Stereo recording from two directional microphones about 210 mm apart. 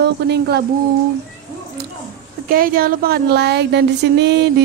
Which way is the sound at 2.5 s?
45° right (ahead or behind).